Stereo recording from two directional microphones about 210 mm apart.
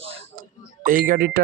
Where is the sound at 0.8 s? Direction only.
40° right (ahead or behind).